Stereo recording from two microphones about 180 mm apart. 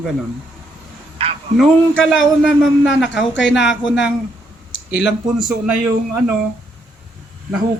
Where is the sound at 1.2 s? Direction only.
35° right (ahead or behind).